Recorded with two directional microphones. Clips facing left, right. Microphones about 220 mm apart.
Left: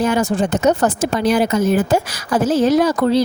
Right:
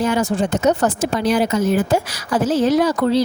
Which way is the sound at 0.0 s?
50° left (ahead or behind).